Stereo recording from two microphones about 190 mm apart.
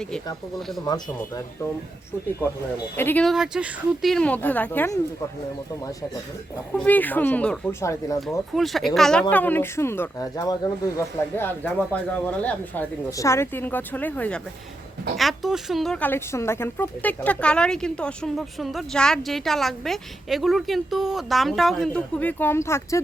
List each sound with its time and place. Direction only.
2.9 s speech: 10° left (ahead or behind)
6.7 s speech: 10° left (ahead or behind)
8.5 s speech: centre (ahead or behind)